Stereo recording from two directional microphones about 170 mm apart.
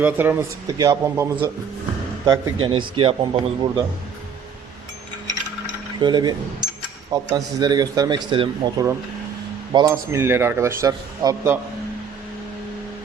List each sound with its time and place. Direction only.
0.0 s speech: 10° right (ahead or behind)
2.2 s speech: 30° right (ahead or behind)
6.0 s speech: 25° right (ahead or behind)